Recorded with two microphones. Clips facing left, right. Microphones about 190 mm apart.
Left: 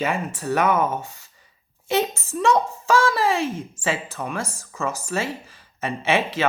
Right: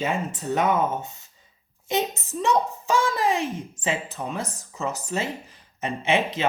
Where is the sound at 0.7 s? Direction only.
20° right (ahead or behind).